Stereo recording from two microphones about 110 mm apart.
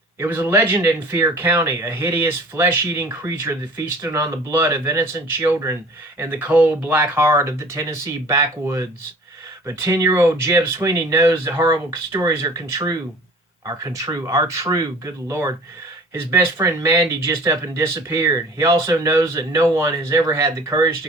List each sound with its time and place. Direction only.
0.2 s speech: 20° right (ahead or behind)